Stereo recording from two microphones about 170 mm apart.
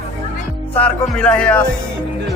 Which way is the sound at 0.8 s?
5° left (ahead or behind).